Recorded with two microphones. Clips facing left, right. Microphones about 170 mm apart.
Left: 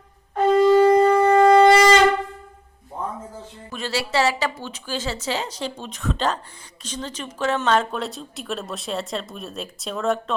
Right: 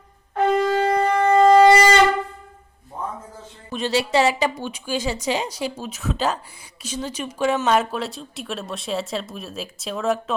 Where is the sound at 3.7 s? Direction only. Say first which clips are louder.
Right 4 dB; 20° right (ahead or behind).